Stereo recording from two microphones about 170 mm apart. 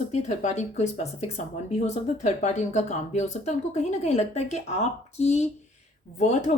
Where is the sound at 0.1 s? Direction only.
45° left (ahead or behind).